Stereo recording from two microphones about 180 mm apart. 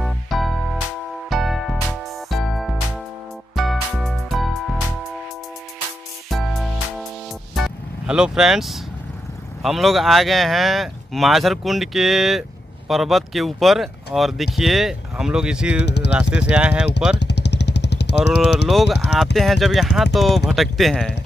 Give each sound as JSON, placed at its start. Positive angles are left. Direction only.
{"t": 0.0, "sound": "music", "side_deg": 0}
{"t": 6.3, "sound": "music", "side_deg": 0}
{"t": 7.5, "sound": "vehicle", "side_deg": -5}
{"t": 9.6, "sound": "speech", "side_deg": 0}
{"t": 15.8, "sound": "speech", "side_deg": 70}
{"t": 16.3, "sound": "speech", "side_deg": -5}
{"t": 17.1, "sound": "vehicle", "side_deg": 70}
{"t": 18.3, "sound": "speech", "side_deg": -5}